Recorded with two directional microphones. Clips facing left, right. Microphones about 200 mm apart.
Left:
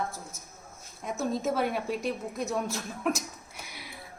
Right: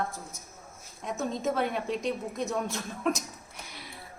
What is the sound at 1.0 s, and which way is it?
Speech, 5° left (ahead or behind).